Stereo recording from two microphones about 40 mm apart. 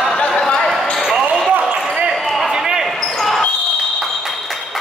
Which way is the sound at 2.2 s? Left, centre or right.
Centre.